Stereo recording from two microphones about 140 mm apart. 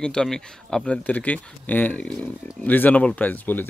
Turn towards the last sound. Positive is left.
turn(degrees=10)  # may be behind; listen again after turning